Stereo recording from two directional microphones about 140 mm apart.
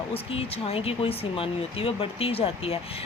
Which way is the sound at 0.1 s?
45° left (ahead or behind).